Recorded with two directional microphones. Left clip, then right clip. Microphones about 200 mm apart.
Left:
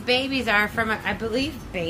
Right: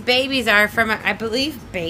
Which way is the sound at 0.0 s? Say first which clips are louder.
Right 5 dB; 50° right (ahead or behind).